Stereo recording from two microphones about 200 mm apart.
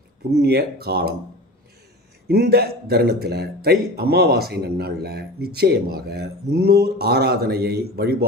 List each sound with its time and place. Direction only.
0.3 s a man's voice: 50° right (ahead or behind)
2.2 s a man's voice: 50° right (ahead or behind)